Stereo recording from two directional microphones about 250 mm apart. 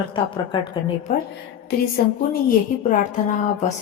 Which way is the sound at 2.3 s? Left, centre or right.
Left.